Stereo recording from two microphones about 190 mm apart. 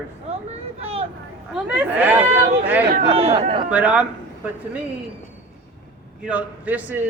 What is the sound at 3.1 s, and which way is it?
Speech, 30° right (ahead or behind).